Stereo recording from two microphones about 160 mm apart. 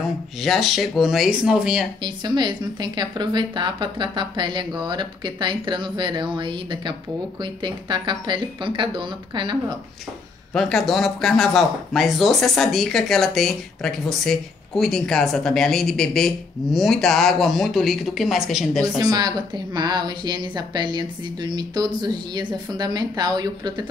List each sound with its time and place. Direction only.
0.4 s speech: centre (ahead or behind)
2.0 s a woman's voice: 25° right (ahead or behind)
10.5 s speech: centre (ahead or behind)
18.9 s a woman's voice: 25° right (ahead or behind)